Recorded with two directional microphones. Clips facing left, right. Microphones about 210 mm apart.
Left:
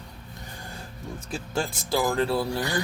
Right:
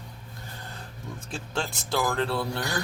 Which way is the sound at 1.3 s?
5° left (ahead or behind).